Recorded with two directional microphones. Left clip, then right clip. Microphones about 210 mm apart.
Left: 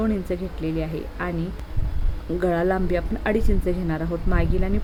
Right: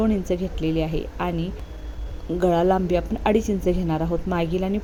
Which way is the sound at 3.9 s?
15° right (ahead or behind).